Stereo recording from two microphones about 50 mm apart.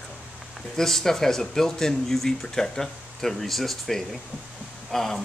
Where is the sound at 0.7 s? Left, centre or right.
Centre.